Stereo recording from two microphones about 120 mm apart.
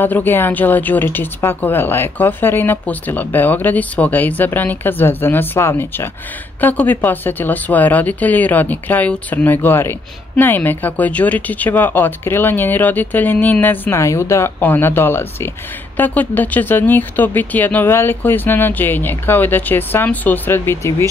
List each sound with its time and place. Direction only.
0.0 s speech: 15° left (ahead or behind)